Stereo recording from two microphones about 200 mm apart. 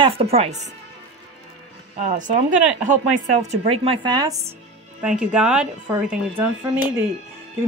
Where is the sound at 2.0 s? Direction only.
40° right (ahead or behind).